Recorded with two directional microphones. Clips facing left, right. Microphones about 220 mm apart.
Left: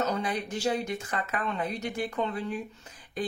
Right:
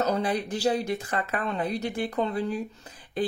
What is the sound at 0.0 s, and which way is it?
Speech, 35° right (ahead or behind).